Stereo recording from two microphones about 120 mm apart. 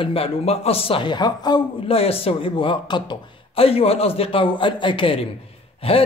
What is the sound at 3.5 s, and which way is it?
A man's voice, 55° left (ahead or behind).